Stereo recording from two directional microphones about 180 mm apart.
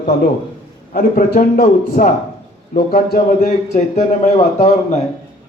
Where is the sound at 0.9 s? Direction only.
50° left (ahead or behind).